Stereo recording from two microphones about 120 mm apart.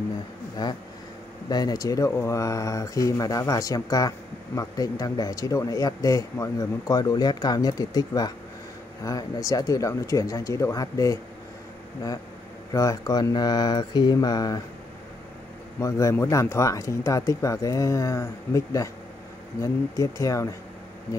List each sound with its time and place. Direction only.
0.6 s speech: 35° left (ahead or behind)
12.7 s speech: 30° left (ahead or behind)
15.8 s speech: 25° left (ahead or behind)